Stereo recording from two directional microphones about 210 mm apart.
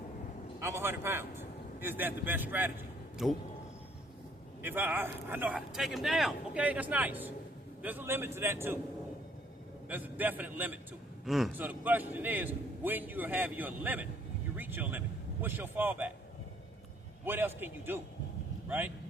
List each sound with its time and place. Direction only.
0.6 s a man's voice: 10° right (ahead or behind)
4.6 s a man's voice: 10° right (ahead or behind)
9.9 s a man's voice: 10° right (ahead or behind)
17.2 s a man's voice: 10° right (ahead or behind)